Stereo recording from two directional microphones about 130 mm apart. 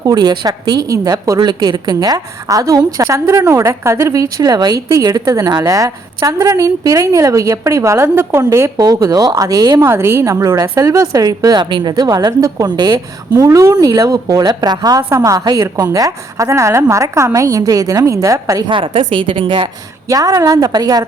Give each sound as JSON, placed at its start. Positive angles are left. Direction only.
{"t": 0.0, "sound": "a woman's voice", "side_deg": -30}
{"t": 18.7, "sound": "a woman's voice", "side_deg": -45}
{"t": 20.1, "sound": "a woman's voice", "side_deg": -25}